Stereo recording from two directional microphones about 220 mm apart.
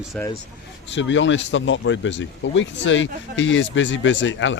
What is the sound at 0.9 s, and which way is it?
Speech, 55° left (ahead or behind).